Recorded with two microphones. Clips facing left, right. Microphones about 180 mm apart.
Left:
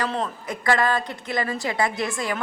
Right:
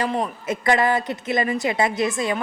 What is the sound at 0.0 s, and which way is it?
A woman's voice, 15° right (ahead or behind).